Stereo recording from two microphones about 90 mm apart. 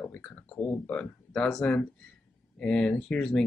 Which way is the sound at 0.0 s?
10° left (ahead or behind).